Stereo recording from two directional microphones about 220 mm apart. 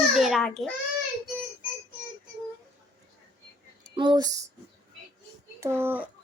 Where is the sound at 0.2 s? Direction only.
Centre (ahead or behind).